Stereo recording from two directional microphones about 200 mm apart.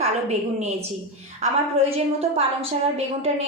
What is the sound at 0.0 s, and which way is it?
Speech, 35° right (ahead or behind).